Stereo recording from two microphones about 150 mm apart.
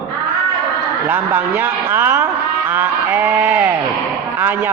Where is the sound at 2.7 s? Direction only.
15° right (ahead or behind).